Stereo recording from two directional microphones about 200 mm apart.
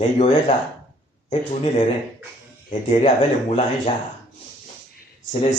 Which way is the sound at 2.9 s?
35° left (ahead or behind).